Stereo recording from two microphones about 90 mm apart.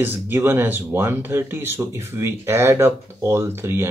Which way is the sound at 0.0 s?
25° right (ahead or behind).